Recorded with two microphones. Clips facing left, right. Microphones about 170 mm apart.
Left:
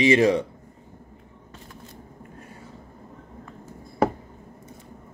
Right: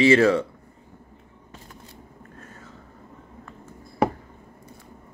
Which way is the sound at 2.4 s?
10° left (ahead or behind).